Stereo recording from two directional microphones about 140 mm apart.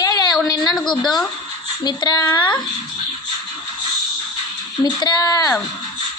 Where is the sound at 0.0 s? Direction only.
30° left (ahead or behind).